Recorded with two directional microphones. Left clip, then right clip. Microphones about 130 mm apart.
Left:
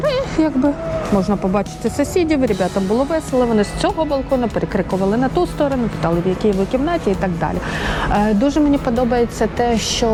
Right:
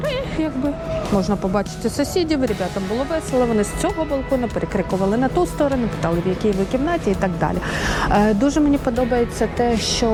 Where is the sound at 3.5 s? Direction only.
20° left (ahead or behind).